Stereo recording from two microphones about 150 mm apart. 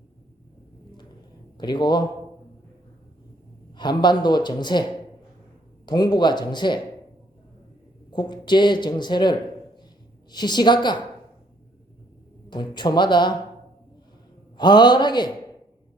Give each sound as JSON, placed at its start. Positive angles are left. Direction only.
{"t": 1.5, "sound": "speech", "side_deg": 30}
{"t": 3.8, "sound": "speech", "side_deg": 30}
{"t": 8.1, "sound": "speech", "side_deg": 30}
{"t": 10.3, "sound": "speech", "side_deg": 30}
{"t": 12.5, "sound": "speech", "side_deg": 30}
{"t": 14.6, "sound": "speech", "side_deg": 30}